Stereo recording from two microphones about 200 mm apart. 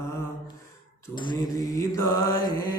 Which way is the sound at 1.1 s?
20° left (ahead or behind).